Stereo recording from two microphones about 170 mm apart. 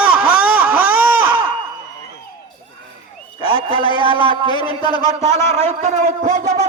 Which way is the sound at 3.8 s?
30° left (ahead or behind).